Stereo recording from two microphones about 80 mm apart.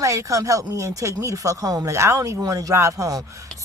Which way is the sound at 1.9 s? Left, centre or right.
Right.